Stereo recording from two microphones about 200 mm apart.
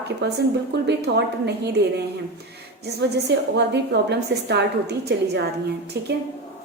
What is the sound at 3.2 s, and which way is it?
A woman's voice, 60° right (ahead or behind).